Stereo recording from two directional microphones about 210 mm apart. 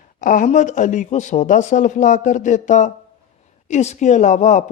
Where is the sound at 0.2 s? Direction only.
40° left (ahead or behind).